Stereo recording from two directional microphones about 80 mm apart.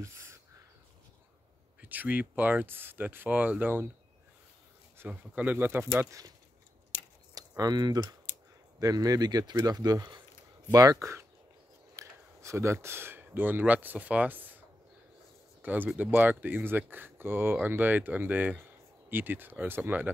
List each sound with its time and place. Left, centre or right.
0.0 s a sound: right
1.8 s speech: right
4.9 s speech: right
7.3 s speech: right
8.7 s speech: right
10.7 s speech: right
15.6 s speech: right